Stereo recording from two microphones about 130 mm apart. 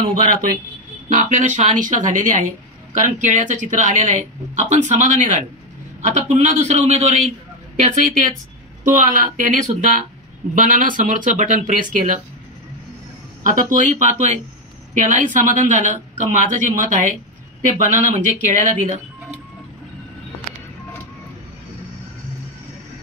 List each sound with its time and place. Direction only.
0.1 s a man's voice: 90° right
8.8 s speech: 90° right
10.5 s speech: 90° right
13.4 s speech: 90° right; by 14.4 s 65° right (ahead or behind)
15.0 s speech: 85° right
17.6 s speech: 75° right (ahead or behind)